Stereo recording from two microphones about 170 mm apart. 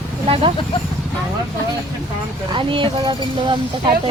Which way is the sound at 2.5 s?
30° right (ahead or behind).